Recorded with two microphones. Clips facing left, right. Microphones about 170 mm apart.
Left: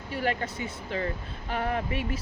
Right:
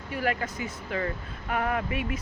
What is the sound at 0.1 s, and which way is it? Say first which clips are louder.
Speech: even; 30° left (ahead or behind).